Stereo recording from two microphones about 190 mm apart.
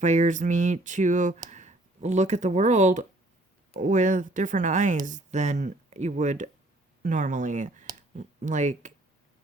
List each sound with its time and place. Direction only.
0.0 s speech: 40° right (ahead or behind)